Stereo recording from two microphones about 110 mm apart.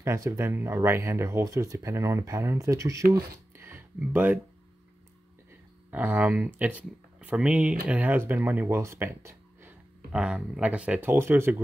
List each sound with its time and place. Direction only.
0.0 s speech: 25° right (ahead or behind)
5.9 s speech: 15° right (ahead or behind)
10.1 s speech: 10° right (ahead or behind)